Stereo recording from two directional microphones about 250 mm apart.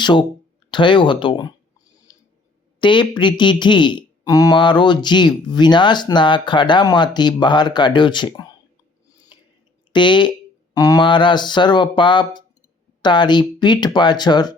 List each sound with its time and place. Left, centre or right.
0.0 s speech: centre
2.1 s a sound: centre
2.8 s speech: centre
9.9 s speech: centre